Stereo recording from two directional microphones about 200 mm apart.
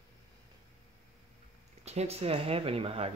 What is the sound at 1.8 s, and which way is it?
Speech, 30° right (ahead or behind).